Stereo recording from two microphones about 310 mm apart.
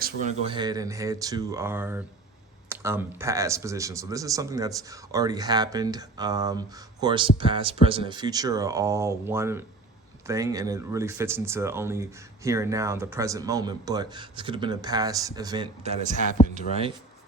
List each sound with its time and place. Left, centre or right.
0.0 s speech: right
16.4 s speech: left